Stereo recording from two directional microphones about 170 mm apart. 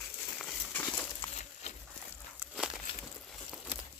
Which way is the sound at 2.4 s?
5° right (ahead or behind).